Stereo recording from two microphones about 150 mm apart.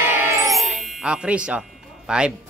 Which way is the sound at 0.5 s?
Centre (ahead or behind).